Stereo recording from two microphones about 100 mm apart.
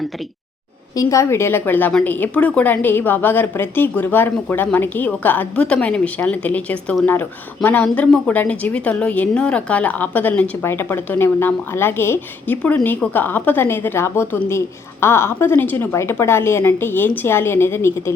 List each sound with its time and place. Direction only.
0.9 s a woman's voice: 30° left (ahead or behind)